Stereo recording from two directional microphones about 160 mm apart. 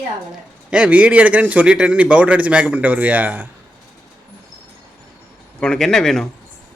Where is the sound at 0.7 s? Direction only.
10° right (ahead or behind).